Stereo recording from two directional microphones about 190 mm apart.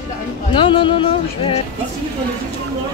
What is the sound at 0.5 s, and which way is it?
Speech, 25° left (ahead or behind).